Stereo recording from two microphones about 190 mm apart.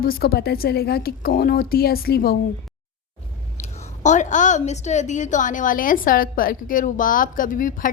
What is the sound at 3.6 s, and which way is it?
A woman's voice, 40° left (ahead or behind).